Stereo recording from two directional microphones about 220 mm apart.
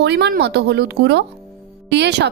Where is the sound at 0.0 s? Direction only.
50° right (ahead or behind).